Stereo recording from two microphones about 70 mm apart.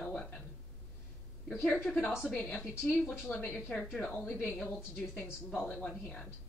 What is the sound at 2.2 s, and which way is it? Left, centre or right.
Speech, centre.